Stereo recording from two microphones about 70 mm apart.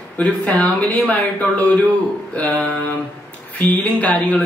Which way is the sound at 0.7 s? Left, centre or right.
Left.